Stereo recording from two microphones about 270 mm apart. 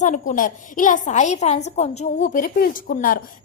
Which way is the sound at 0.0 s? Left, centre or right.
Left.